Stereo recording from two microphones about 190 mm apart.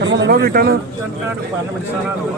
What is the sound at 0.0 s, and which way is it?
Speech, 75° right (ahead or behind).